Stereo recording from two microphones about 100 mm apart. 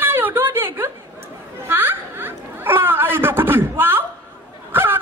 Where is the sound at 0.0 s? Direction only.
20° right (ahead or behind).